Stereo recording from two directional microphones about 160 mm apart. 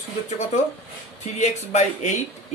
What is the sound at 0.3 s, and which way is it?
Speech, 45° left (ahead or behind).